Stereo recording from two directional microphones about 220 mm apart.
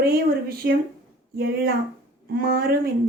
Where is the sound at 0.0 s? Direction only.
45° right (ahead or behind).